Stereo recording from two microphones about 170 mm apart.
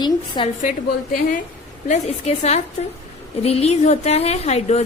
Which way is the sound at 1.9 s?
40° left (ahead or behind).